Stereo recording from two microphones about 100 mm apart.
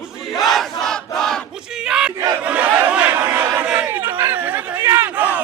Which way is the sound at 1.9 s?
5° right (ahead or behind).